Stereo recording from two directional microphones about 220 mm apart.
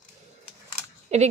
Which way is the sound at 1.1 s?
30° right (ahead or behind).